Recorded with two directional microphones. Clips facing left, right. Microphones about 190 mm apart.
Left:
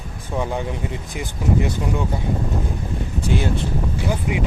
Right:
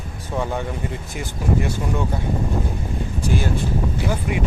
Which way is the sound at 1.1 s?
15° left (ahead or behind).